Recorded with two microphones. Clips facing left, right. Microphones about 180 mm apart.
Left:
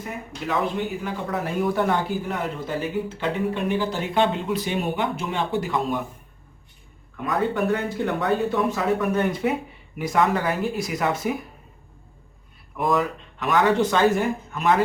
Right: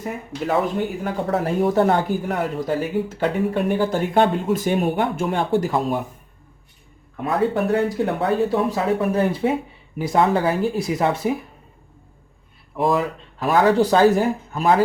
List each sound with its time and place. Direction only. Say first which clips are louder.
0.4 s speech: right 4 dB; 40° right (ahead or behind)
1.3 s speech: right 5 dB; 30° right (ahead or behind)
1.9 s speech: right 4 dB; 50° right (ahead or behind)
7.3 s speech: right 3 dB; 35° right (ahead or behind)
12.7 s speech: right 2 dB; 30° right (ahead or behind)